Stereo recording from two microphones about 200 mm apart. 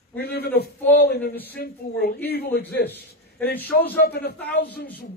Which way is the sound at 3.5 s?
10° left (ahead or behind).